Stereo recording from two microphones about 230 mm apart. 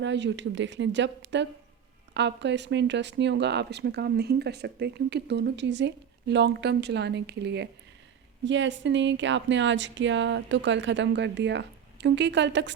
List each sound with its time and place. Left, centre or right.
0.0 s speech: right